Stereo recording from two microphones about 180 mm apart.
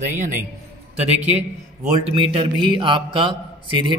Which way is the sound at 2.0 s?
30° right (ahead or behind).